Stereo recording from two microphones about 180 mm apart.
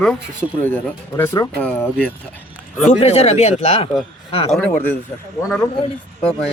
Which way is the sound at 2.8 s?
35° left (ahead or behind).